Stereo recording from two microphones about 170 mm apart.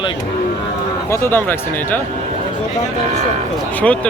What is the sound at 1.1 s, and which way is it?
Speech, 15° left (ahead or behind).